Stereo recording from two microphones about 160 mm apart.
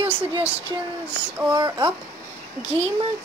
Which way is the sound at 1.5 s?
30° right (ahead or behind).